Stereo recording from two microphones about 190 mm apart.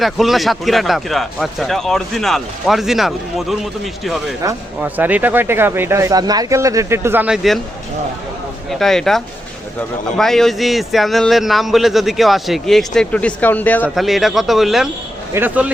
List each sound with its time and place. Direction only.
0.0 s a man's voice: centre (ahead or behind)
8.7 s a man's voice: centre (ahead or behind)